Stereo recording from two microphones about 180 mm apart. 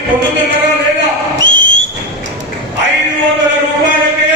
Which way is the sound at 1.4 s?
90° right.